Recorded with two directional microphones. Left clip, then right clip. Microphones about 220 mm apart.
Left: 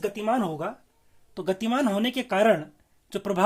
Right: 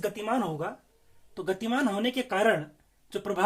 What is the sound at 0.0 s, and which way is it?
Speech, 45° left (ahead or behind).